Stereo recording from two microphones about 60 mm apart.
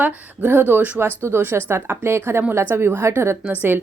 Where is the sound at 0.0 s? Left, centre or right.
Right.